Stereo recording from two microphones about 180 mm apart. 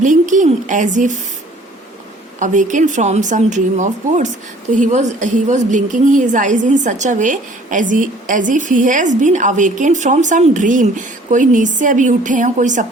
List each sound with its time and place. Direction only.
0.0 s a woman's voice: 45° right (ahead or behind)
2.4 s a woman's voice: 45° right (ahead or behind)